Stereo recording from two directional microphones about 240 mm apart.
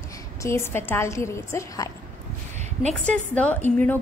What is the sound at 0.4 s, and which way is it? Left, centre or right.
A woman's voice, centre.